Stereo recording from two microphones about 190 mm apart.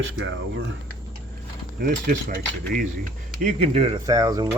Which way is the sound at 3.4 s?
35° right (ahead or behind).